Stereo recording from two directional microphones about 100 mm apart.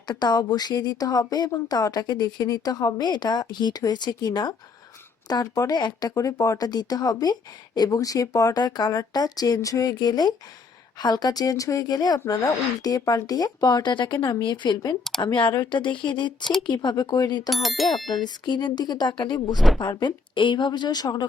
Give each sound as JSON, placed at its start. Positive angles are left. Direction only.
{"t": 0.1, "sound": "speech", "side_deg": 45}
{"t": 16.4, "sound": "speech", "side_deg": 5}
{"t": 16.6, "sound": "speech", "side_deg": 45}
{"t": 17.5, "sound": "speech", "side_deg": 0}
{"t": 18.4, "sound": "speech", "side_deg": 50}
{"t": 19.5, "sound": "speech", "side_deg": 0}
{"t": 19.8, "sound": "speech", "side_deg": 45}